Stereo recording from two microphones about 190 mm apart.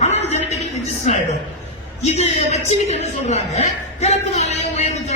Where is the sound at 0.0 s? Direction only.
35° left (ahead or behind).